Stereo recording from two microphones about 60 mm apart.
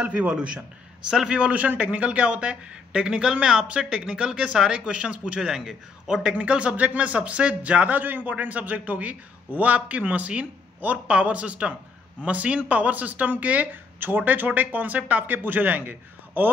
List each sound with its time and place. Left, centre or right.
0.0 s speech: right
1.4 s speech: right